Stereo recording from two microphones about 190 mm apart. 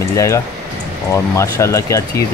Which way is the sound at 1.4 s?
15° left (ahead or behind).